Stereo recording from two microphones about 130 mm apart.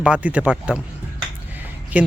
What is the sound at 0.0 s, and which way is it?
Speech, 10° right (ahead or behind).